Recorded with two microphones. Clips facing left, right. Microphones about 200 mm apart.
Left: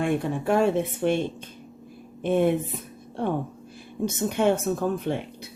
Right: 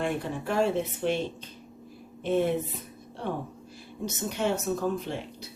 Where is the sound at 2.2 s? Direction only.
55° left (ahead or behind).